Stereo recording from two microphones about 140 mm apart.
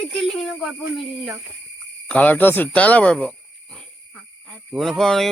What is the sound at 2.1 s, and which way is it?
Speech, 10° left (ahead or behind).